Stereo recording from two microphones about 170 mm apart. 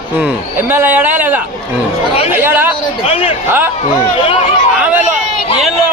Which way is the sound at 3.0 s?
35° left (ahead or behind).